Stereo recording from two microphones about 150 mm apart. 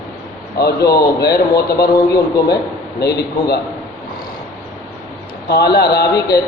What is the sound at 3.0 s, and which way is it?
Speech, 90° left.